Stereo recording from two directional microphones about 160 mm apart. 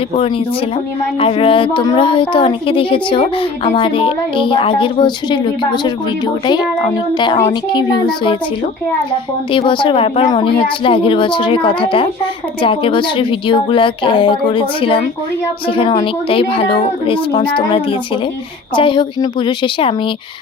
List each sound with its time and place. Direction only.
1.2 s speech: 35° left (ahead or behind)
9.5 s speech: 30° left (ahead or behind)